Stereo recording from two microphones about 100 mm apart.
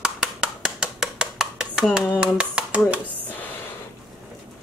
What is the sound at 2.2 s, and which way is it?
Hands, 10° right (ahead or behind).